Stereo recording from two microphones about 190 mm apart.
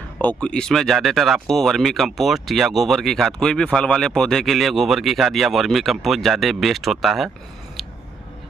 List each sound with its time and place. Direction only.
0.2 s speech: 5° left (ahead or behind)